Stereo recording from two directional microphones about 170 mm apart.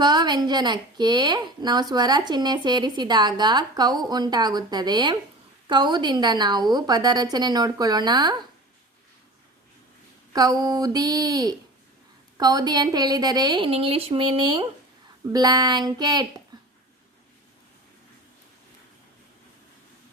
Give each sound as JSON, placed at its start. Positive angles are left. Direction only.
{"t": 0.0, "sound": "a woman's voice", "side_deg": -25}
{"t": 10.3, "sound": "a woman's voice", "side_deg": -20}
{"t": 16.5, "sound": "a sound", "side_deg": -20}